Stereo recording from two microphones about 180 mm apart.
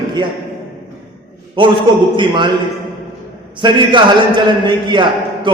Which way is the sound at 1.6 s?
30° right (ahead or behind).